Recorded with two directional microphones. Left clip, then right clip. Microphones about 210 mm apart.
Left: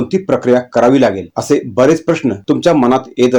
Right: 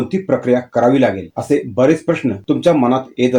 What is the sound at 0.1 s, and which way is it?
Speech, 20° left (ahead or behind).